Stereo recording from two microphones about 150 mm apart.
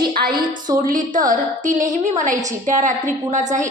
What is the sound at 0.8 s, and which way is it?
A woman's voice, 60° right (ahead or behind).